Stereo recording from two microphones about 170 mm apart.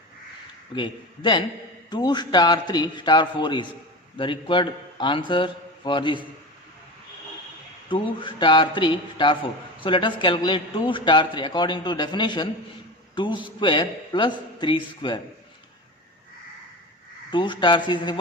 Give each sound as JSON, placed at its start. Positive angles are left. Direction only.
{"t": 0.8, "sound": "a man's voice", "side_deg": 30}
{"t": 7.9, "sound": "a man's voice", "side_deg": 30}
{"t": 17.3, "sound": "a man's voice", "side_deg": 25}